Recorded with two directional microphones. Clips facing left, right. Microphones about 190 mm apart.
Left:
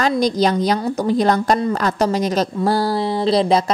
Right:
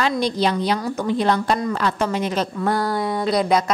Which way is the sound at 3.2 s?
30° left (ahead or behind).